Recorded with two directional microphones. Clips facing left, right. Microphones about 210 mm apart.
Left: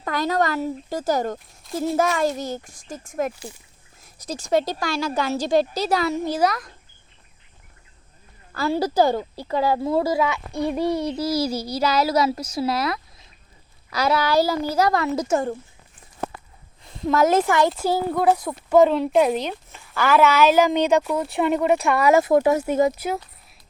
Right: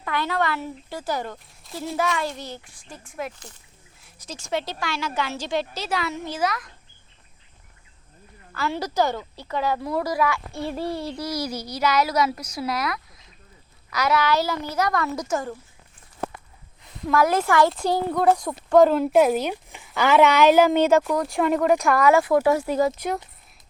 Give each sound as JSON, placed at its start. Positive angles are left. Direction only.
{"t": 0.0, "sound": "speech", "side_deg": 40}
{"t": 1.7, "sound": "speech", "side_deg": 0}
{"t": 2.0, "sound": "a child's voice", "side_deg": 45}
{"t": 3.3, "sound": "speech", "side_deg": 10}
{"t": 4.0, "sound": "speech", "side_deg": 40}
{"t": 8.5, "sound": "a child's voice", "side_deg": 35}
{"t": 17.1, "sound": "a child's voice", "side_deg": 25}
{"t": 17.7, "sound": "speech", "side_deg": 5}
{"t": 21.0, "sound": "speech", "side_deg": 5}
{"t": 22.1, "sound": "a child's voice", "side_deg": 25}
{"t": 22.9, "sound": "speech", "side_deg": 5}